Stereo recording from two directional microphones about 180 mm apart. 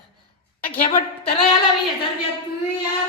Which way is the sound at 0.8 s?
45° left (ahead or behind).